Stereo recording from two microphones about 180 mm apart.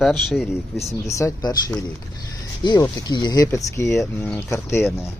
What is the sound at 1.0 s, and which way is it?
Speech, 15° left (ahead or behind).